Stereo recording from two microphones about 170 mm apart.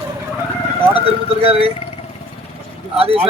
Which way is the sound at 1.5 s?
35° right (ahead or behind).